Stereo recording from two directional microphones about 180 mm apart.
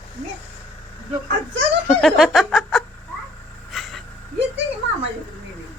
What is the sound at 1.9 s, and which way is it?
Music, centre (ahead or behind).